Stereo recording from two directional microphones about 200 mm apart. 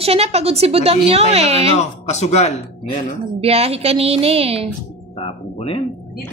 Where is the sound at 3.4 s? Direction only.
30° right (ahead or behind).